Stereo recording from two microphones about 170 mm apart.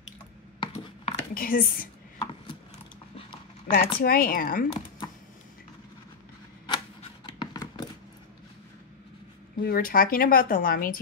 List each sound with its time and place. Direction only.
0.6 s a sound: 35° left (ahead or behind)
1.3 s a woman's voice: 55° left (ahead or behind)
3.2 s clip-clop: 30° left (ahead or behind)
4.0 s a woman's voice: 60° left (ahead or behind)
6.7 s scissors: 30° left (ahead or behind)
9.6 s a woman's voice: 60° left (ahead or behind)